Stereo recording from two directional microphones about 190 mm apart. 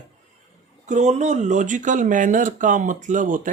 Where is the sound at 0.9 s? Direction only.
40° right (ahead or behind).